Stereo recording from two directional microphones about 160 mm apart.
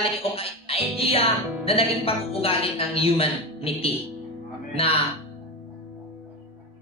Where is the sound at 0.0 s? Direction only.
35° left (ahead or behind).